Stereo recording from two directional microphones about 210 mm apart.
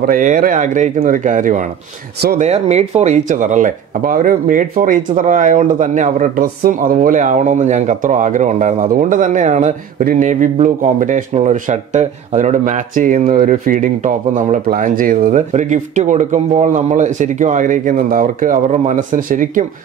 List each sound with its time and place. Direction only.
0.0 s speech: 40° right (ahead or behind)